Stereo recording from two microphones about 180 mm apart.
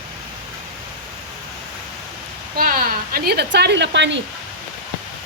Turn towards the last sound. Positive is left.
turn(degrees=-80)